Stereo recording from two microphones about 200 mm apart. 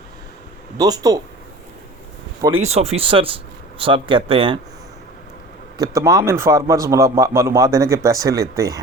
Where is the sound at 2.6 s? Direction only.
30° right (ahead or behind).